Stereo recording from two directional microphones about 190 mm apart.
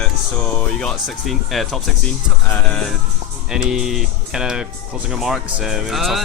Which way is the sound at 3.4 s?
5° right (ahead or behind).